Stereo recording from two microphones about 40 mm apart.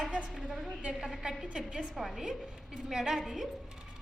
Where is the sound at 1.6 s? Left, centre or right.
Centre.